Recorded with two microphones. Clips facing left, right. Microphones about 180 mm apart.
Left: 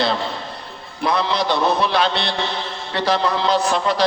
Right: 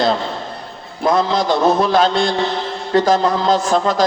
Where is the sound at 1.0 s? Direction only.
45° right (ahead or behind).